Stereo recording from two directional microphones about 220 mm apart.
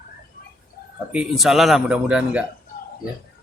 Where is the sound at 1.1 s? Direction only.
5° right (ahead or behind).